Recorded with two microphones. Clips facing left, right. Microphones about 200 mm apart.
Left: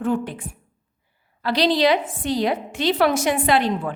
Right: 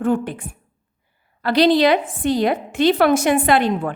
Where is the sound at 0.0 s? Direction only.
50° right (ahead or behind).